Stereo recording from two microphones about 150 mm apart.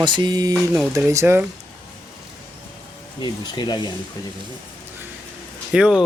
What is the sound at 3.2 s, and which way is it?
Speech, 30° left (ahead or behind).